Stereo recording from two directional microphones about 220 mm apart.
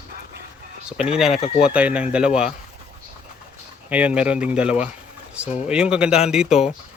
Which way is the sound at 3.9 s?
5° right (ahead or behind).